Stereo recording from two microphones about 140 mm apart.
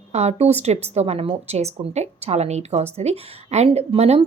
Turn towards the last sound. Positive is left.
turn(degrees=-45)  # may be behind; listen again after turning